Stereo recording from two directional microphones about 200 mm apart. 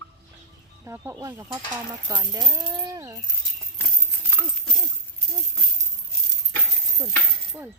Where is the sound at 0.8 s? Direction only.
15° right (ahead or behind).